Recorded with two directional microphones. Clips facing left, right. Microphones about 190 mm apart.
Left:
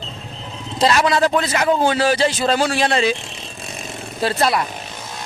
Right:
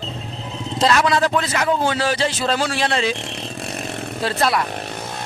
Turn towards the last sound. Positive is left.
turn(degrees=5)  # may be behind; listen again after turning